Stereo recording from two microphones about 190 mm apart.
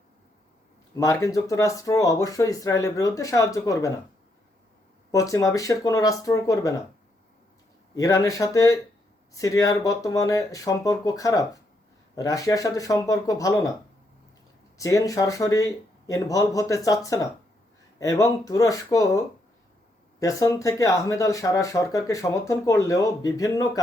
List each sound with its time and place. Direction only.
0.9 s speech: 15° left (ahead or behind)
5.1 s speech: 15° left (ahead or behind)
7.9 s speech: 15° left (ahead or behind)
14.8 s speech: 15° left (ahead or behind)